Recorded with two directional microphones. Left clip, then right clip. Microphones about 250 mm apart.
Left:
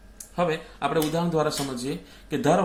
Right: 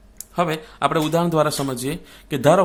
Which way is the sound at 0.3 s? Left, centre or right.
Right.